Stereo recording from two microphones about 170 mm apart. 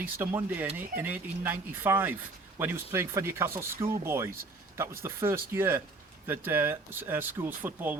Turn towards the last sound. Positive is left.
turn(degrees=-10)  # may be behind; listen again after turning